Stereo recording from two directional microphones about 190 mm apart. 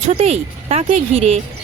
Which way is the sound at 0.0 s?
30° right (ahead or behind).